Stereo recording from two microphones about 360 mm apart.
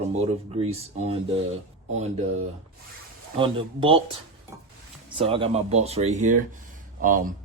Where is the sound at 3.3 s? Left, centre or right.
Centre.